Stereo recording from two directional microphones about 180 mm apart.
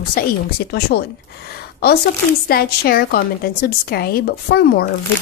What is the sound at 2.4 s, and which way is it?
A woman's voice, 55° left (ahead or behind).